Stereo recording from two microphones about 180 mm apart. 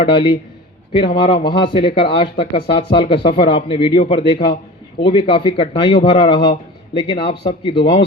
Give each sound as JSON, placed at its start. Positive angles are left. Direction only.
{"t": 0.0, "sound": "speech", "side_deg": 30}